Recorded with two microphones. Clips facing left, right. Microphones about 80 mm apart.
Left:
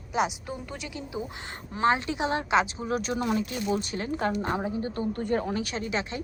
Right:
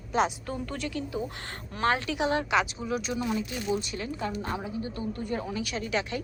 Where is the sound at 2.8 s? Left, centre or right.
Left.